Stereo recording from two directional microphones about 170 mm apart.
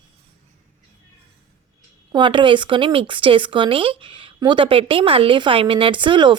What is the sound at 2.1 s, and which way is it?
Speech, 30° right (ahead or behind).